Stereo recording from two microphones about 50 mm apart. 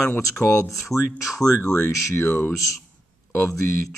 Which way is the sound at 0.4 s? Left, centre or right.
Left.